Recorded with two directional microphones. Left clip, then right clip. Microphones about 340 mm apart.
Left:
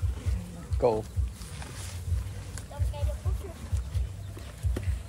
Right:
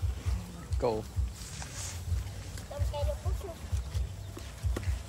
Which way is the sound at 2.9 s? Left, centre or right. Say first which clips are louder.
Right 5 dB; right.